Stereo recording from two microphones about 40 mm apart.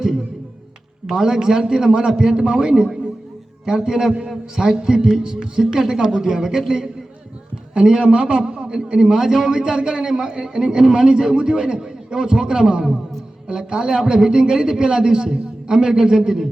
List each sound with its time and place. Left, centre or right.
1.0 s a man's voice: centre